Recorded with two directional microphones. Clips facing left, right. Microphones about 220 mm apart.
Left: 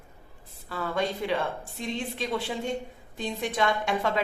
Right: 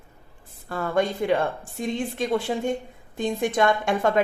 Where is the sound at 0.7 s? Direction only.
50° right (ahead or behind).